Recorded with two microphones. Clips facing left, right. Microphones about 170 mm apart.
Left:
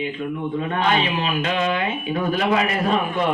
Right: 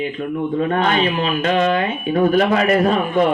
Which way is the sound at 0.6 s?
45° right (ahead or behind).